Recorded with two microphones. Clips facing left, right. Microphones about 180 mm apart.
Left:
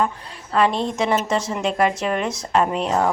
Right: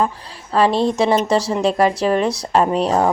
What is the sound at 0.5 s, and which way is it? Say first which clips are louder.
Speech: right 4 dB; 35° right (ahead or behind).